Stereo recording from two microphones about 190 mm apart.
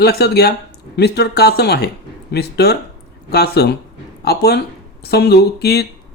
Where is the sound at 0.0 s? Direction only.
55° left (ahead or behind).